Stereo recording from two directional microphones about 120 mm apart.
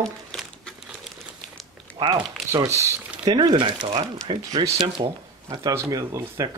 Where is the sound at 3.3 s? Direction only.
35° right (ahead or behind).